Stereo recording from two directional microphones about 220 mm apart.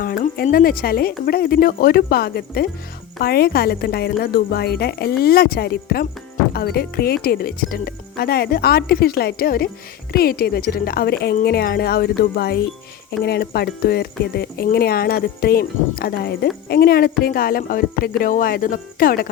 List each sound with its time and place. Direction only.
0.0 s speech: 40° left (ahead or behind)